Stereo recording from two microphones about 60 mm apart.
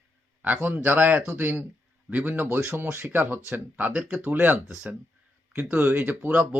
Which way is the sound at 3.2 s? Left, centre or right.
Right.